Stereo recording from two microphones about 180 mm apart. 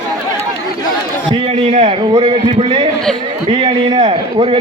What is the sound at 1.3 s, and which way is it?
A man's voice, 30° right (ahead or behind).